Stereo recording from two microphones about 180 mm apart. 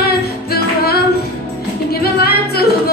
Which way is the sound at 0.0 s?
60° left (ahead or behind).